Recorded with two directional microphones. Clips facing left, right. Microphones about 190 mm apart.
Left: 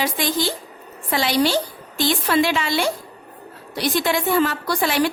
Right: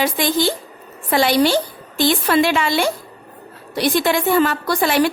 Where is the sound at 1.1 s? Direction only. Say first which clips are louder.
Right 4 dB; 55° right (ahead or behind).